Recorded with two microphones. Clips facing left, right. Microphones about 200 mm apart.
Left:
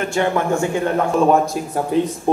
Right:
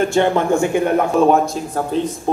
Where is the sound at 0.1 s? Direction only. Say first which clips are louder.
Right 3 dB; 25° right (ahead or behind).